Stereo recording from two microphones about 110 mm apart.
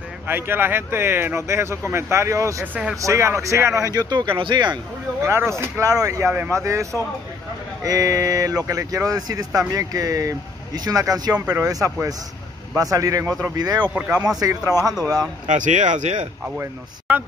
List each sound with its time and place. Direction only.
0.3 s speech: 20° right (ahead or behind); by 4.7 s 45° right (ahead or behind)
5.2 s speech: 25° right (ahead or behind)
11.3 s speech: 15° right (ahead or behind)
11.6 s speech: 30° right (ahead or behind)
15.5 s speech: 90° right